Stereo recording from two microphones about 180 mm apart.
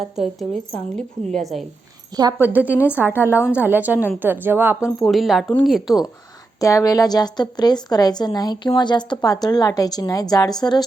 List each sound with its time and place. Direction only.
0.0 s a woman's voice: centre (ahead or behind)
2.4 s speech: 10° right (ahead or behind)
2.6 s a woman's voice: 10° left (ahead or behind)
3.5 s speech: 10° right (ahead or behind)
4.9 s a woman's voice: centre (ahead or behind)
6.6 s a woman's voice: 20° left (ahead or behind)